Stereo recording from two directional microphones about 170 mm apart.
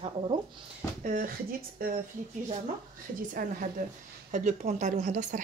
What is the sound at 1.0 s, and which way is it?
Speech, 55° right (ahead or behind).